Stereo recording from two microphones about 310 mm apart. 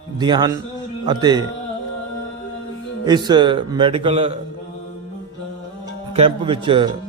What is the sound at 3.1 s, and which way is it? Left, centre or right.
Speech, centre.